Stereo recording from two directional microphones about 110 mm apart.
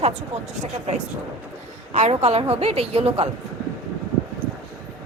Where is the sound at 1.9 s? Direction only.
80° right; by 3.3 s 65° right (ahead or behind).